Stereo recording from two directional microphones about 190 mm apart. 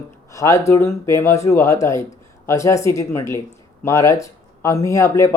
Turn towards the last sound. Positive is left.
turn(degrees=15)  # may be behind; listen again after turning